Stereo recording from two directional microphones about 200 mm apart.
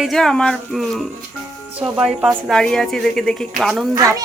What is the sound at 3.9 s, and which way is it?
Speech, 15° right (ahead or behind).